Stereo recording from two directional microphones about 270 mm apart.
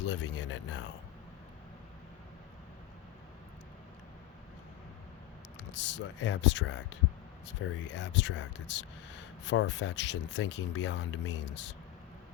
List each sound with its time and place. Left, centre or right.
0.0 s speech: left
5.7 s speech: left